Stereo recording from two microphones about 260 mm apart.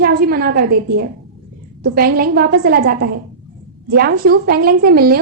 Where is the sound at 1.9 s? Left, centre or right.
Right.